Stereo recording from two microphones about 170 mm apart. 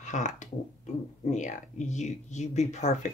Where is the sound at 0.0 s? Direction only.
45° left (ahead or behind).